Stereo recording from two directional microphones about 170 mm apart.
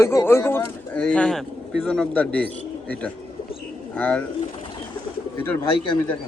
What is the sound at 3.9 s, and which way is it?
Speech, 10° left (ahead or behind).